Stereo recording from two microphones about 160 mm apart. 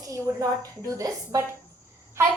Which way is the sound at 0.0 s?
20° right (ahead or behind).